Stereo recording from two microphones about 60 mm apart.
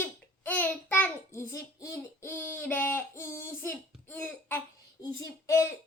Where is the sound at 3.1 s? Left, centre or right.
Left.